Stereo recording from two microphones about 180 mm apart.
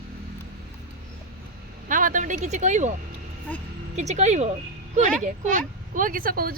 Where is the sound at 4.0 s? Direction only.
40° right (ahead or behind).